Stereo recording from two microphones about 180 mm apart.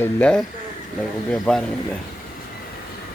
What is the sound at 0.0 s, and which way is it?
Speech, 5° left (ahead or behind).